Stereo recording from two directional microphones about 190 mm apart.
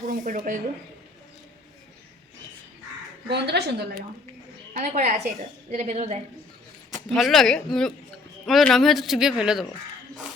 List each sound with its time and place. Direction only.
0.1 s speech: 45° right (ahead or behind)
3.2 s a woman's voice: 60° right (ahead or behind)
4.7 s a woman's voice: 40° right (ahead or behind)
6.9 s a man's voice: centre (ahead or behind)